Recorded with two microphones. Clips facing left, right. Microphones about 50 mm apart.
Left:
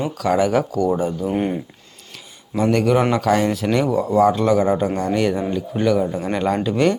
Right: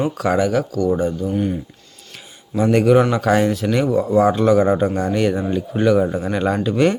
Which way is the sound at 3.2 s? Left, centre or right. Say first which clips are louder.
Right 1 dB; centre.